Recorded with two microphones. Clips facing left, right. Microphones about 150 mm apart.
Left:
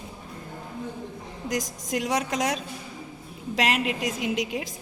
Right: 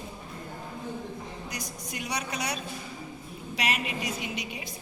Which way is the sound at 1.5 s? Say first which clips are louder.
Left 10 dB; 90° left.